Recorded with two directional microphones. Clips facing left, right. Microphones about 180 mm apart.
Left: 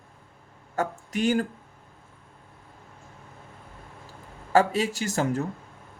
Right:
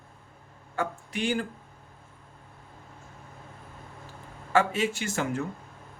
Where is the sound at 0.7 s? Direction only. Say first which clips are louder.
Left 3 dB; 40° left (ahead or behind).